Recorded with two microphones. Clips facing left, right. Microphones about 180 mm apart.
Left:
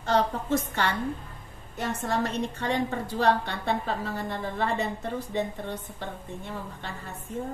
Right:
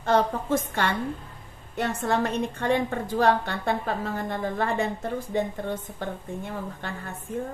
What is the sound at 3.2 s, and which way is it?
A woman's voice, 50° right (ahead or behind).